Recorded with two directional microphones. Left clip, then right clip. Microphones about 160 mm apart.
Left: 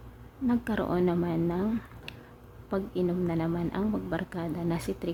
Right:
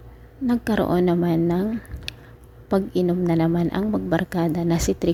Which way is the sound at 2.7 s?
35° right (ahead or behind).